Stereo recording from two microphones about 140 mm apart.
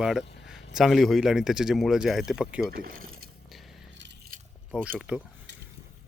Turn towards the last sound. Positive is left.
turn(degrees=-10)  # may be behind; listen again after turning